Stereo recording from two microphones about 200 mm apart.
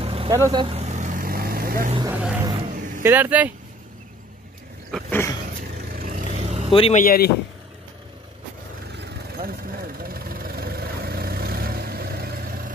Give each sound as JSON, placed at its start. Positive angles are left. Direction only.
{"t": 0.0, "sound": "vehicle", "side_deg": -30}
{"t": 0.3, "sound": "vehicle", "side_deg": -20}
{"t": 2.0, "sound": "speech", "side_deg": -10}
{"t": 4.9, "sound": "roaring cats", "side_deg": 10}
{"t": 5.8, "sound": "vehicle", "side_deg": -40}
{"t": 6.7, "sound": "speech", "side_deg": 30}
{"t": 7.0, "sound": "speech", "side_deg": 50}
{"t": 8.9, "sound": "vehicle", "side_deg": -55}